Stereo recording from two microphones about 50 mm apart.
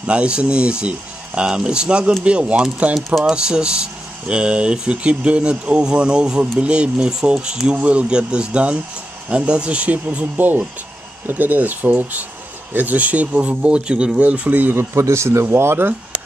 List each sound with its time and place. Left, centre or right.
0.0 s speech: right
7.7 s speech: right
14.5 s speech: right
14.8 s a man's voice: right
15.5 s speech: right